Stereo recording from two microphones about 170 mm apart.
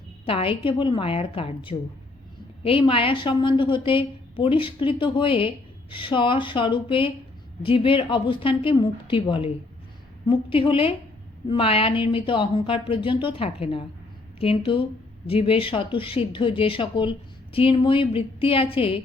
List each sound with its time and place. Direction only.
0.3 s a woman's voice: 35° left (ahead or behind)